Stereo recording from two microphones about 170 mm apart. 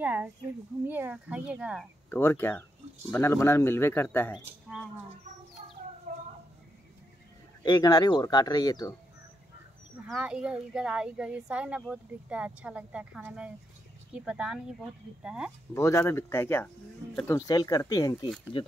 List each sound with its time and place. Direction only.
0.0 s a sound: 10° right (ahead or behind)
0.8 s speech: 10° right (ahead or behind)
2.0 s speech: 15° left (ahead or behind)
4.3 s speech: centre (ahead or behind)
7.6 s speech: 20° left (ahead or behind)
10.0 s speech: 5° right (ahead or behind)
15.7 s speech: 15° left (ahead or behind)
17.5 s speech: 25° left (ahead or behind)